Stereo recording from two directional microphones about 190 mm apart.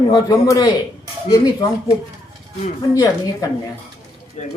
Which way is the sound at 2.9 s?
15° left (ahead or behind).